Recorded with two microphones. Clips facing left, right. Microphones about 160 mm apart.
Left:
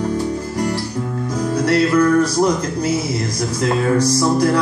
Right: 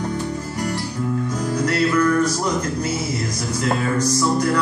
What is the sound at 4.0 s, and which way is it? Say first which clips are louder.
Music: left 4 dB; 35° left (ahead or behind).